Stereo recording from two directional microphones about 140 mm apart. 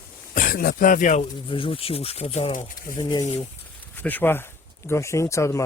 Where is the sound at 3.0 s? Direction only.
25° left (ahead or behind).